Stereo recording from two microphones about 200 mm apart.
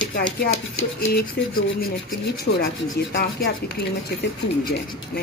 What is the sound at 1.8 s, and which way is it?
A woman's voice, 50° left (ahead or behind).